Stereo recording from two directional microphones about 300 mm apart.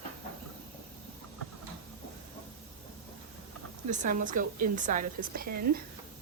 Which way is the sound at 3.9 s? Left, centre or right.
Right.